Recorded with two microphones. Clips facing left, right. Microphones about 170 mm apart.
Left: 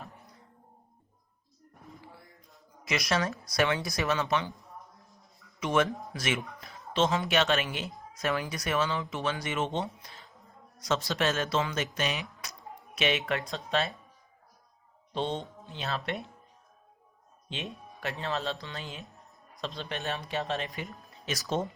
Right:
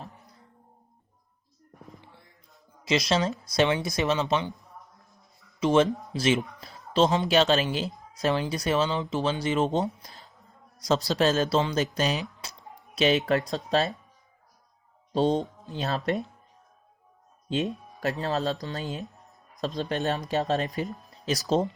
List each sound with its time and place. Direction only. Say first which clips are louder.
2.8 s speech: right 5 dB; 25° right (ahead or behind)
5.5 s speech: right 6 dB; 30° right (ahead or behind)
12.4 s music: right 2 dB; 30° right (ahead or behind)
13.0 s speech: right 7 dB; 35° right (ahead or behind)
15.1 s speech: right 8 dB; 40° right (ahead or behind)
17.5 s speech: right 11 dB; 40° right (ahead or behind)
21.1 s music: right 7 dB; 35° right (ahead or behind)